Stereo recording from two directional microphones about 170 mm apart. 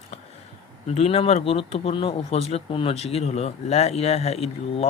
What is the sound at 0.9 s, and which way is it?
Speech, 35° left (ahead or behind).